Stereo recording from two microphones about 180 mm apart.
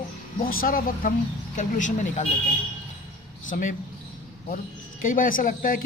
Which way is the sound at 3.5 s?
50° left (ahead or behind).